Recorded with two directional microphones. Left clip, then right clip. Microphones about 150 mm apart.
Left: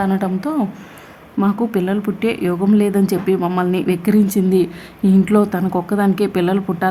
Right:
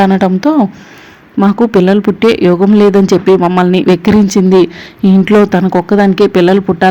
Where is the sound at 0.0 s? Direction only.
30° right (ahead or behind).